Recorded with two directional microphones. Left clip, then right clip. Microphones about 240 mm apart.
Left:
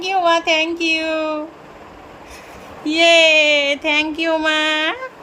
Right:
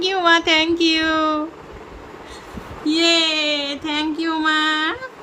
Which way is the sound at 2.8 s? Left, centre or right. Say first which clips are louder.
Left 5 dB; centre.